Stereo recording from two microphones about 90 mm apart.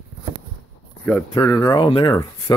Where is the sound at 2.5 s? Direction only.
50° left (ahead or behind).